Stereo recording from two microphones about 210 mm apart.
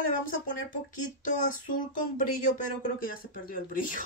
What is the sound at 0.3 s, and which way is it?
Speech, 40° left (ahead or behind).